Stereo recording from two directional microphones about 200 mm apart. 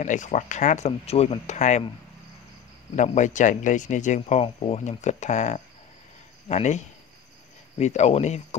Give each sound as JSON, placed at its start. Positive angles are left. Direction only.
{"t": 0.0, "sound": "speech", "side_deg": 40}
{"t": 3.0, "sound": "speech", "side_deg": 40}
{"t": 7.8, "sound": "speech", "side_deg": 35}